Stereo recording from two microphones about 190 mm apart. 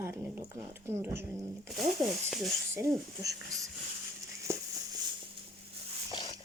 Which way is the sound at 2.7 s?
15° right (ahead or behind).